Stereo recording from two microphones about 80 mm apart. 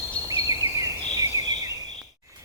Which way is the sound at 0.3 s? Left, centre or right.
Right.